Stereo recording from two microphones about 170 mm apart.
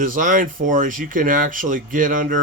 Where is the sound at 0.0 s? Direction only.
50° right (ahead or behind).